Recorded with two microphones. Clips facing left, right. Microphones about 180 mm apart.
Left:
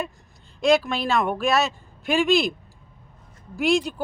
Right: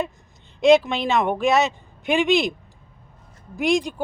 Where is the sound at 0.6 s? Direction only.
20° right (ahead or behind).